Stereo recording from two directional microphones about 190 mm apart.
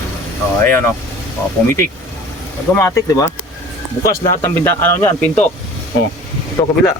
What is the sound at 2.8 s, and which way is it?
Speech, 15° left (ahead or behind).